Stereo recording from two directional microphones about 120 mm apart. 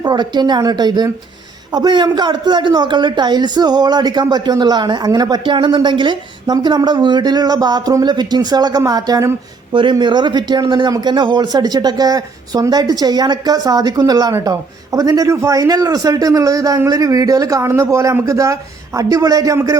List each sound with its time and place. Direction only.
0.0 s a woman's voice: 35° right (ahead or behind)